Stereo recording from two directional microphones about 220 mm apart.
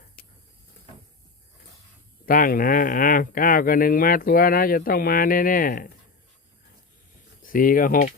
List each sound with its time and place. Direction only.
2.2 s speech: 40° left (ahead or behind)
7.4 s speech: 40° left (ahead or behind)